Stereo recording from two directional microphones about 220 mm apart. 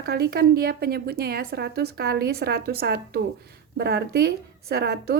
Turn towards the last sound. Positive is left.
turn(degrees=-45)  # may be behind; listen again after turning